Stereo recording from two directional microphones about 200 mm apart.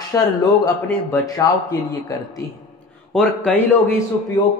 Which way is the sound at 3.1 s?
Centre (ahead or behind).